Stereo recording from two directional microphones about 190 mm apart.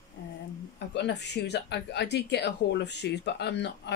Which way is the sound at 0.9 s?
65° left (ahead or behind).